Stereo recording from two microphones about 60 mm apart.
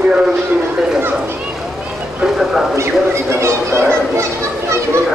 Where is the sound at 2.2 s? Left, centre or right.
Centre.